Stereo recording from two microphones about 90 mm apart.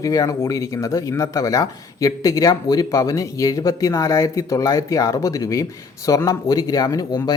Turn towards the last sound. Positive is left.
turn(degrees=45)  # may be behind; listen again after turning